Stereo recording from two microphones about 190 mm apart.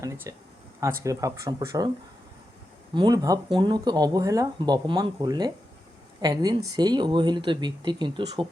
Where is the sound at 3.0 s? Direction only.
20° right (ahead or behind).